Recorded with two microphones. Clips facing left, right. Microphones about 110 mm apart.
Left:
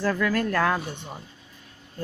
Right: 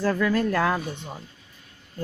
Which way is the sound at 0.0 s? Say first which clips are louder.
Right 2 dB; 20° right (ahead or behind).